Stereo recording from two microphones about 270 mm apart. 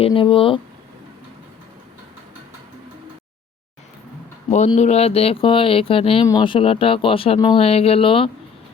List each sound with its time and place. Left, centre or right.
0.0 s speech: centre
4.5 s speech: left